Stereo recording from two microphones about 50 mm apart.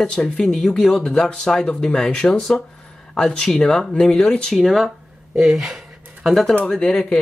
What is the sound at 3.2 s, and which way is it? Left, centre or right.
Speech, centre.